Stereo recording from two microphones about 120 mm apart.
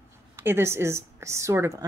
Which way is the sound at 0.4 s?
20° right (ahead or behind).